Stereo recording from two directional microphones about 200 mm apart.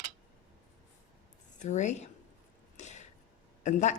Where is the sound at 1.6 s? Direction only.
35° left (ahead or behind).